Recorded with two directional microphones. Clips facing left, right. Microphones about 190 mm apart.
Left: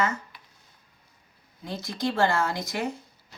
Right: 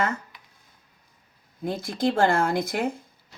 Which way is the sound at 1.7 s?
50° right (ahead or behind).